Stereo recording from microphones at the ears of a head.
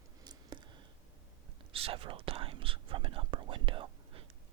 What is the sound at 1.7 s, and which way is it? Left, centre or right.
Speech, right.